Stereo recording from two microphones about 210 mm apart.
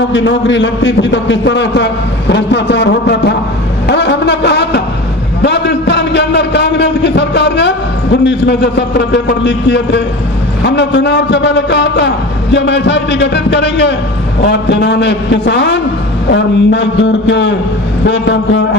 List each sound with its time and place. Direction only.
0.1 s a man's voice: 60° left (ahead or behind)
3.8 s a sound: 55° left (ahead or behind)
8.2 s a man's voice: 55° left (ahead or behind)